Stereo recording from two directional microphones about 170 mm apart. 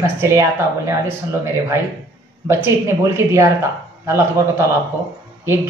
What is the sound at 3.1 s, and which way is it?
Speech, 15° right (ahead or behind).